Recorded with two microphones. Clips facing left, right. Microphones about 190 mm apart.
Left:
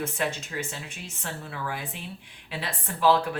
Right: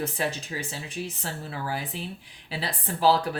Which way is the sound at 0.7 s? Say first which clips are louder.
Right 5 dB; 35° right (ahead or behind).